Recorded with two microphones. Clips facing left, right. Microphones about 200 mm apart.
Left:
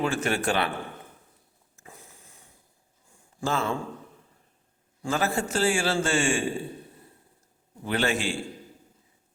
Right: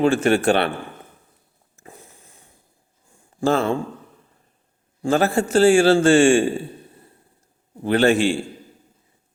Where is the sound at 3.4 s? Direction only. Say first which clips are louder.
Right 9 dB; 60° right (ahead or behind).